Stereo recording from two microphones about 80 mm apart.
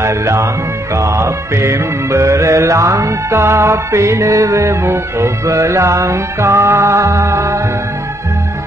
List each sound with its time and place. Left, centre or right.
0.0 s music: right